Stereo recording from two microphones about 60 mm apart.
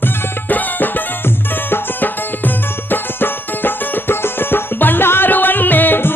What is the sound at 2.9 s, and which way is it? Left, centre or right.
Music, left.